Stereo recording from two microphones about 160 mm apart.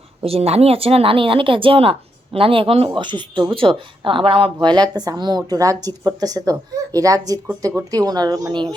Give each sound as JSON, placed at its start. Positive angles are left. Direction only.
{"t": 0.2, "sound": "speech", "side_deg": -40}